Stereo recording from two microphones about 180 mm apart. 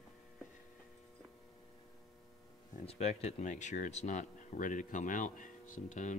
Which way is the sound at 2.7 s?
35° left (ahead or behind).